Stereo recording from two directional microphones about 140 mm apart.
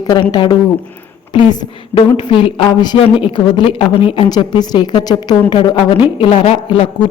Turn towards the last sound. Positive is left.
turn(degrees=40)  # may be behind; listen again after turning